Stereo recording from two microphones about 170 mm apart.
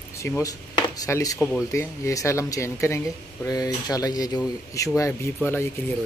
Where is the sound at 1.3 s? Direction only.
5° left (ahead or behind).